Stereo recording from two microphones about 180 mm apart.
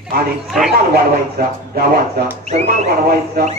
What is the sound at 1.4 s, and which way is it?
Speech, 60° right (ahead or behind).